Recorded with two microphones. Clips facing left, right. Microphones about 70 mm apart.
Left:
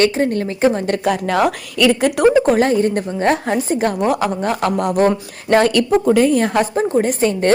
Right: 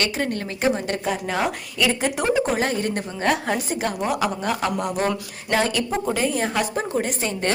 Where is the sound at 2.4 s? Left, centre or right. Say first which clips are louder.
Left 8 dB; left.